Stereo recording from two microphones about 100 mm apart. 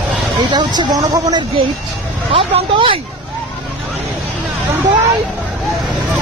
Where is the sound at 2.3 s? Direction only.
65° right (ahead or behind).